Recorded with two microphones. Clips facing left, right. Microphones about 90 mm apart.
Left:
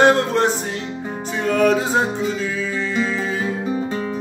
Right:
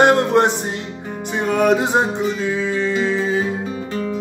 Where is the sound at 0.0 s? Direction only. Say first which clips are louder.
Right 2 dB; 20° right (ahead or behind).